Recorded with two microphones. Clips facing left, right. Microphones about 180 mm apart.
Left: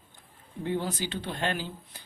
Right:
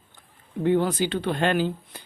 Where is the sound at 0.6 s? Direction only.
65° right (ahead or behind).